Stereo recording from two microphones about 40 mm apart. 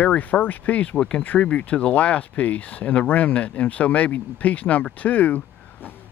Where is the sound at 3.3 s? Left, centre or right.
Left.